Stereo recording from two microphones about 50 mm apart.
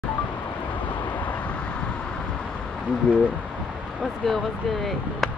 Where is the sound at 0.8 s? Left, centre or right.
Left.